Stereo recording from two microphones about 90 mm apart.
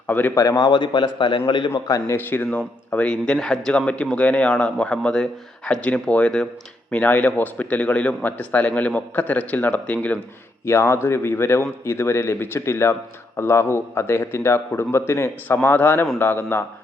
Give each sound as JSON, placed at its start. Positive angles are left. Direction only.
{"t": 0.1, "sound": "speech", "side_deg": 20}
{"t": 0.5, "sound": "a man's voice", "side_deg": 55}
{"t": 1.7, "sound": "a man's voice", "side_deg": 30}
{"t": 10.7, "sound": "speech", "side_deg": 30}